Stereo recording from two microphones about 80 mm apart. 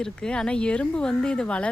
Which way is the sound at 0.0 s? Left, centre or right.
Centre.